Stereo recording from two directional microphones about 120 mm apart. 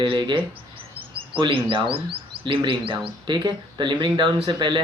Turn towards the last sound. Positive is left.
turn(degrees=-40)  # may be behind; listen again after turning